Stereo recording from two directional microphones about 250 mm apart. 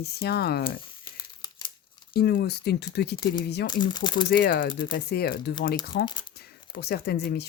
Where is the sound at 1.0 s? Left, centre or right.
Centre.